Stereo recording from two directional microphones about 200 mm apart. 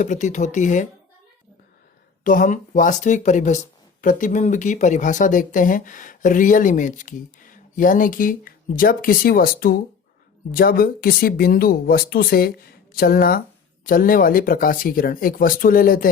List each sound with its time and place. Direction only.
0.0 s speech: 40° left (ahead or behind)
2.2 s speech: 40° left (ahead or behind)